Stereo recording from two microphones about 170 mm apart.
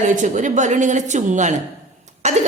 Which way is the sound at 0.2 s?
45° right (ahead or behind).